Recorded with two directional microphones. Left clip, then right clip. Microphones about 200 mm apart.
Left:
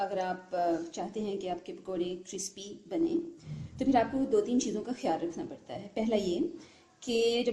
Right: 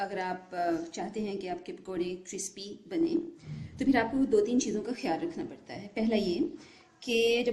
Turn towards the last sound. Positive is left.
turn(degrees=0)  # may be behind; listen again after turning